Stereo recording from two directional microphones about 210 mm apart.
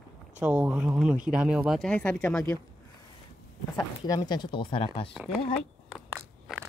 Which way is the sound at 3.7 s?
20° left (ahead or behind).